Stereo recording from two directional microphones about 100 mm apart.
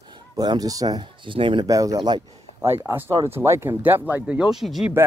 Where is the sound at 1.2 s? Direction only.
55° right (ahead or behind).